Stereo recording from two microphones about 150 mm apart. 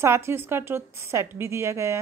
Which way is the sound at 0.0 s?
15° right (ahead or behind).